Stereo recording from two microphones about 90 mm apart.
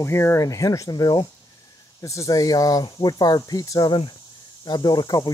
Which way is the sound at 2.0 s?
35° left (ahead or behind).